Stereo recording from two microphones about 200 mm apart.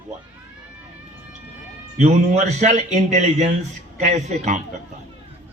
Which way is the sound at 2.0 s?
35° right (ahead or behind).